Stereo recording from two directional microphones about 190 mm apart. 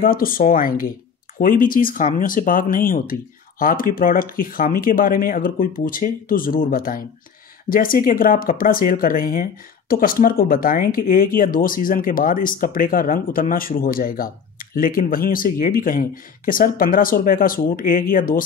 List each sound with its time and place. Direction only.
0.0 s speech: 50° left (ahead or behind)